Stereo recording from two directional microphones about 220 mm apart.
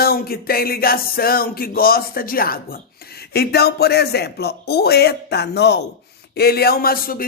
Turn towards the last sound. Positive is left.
turn(degrees=40)  # may be behind; listen again after turning